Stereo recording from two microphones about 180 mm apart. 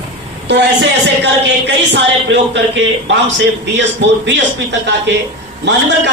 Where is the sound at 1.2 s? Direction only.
70° right (ahead or behind).